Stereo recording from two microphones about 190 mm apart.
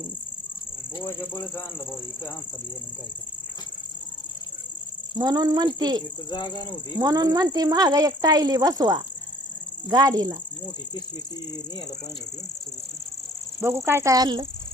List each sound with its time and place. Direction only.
5.1 s speech: 20° right (ahead or behind)
6.3 s speech: 20° left (ahead or behind)
7.0 s speech: 20° right (ahead or behind)
13.6 s speech: 10° right (ahead or behind)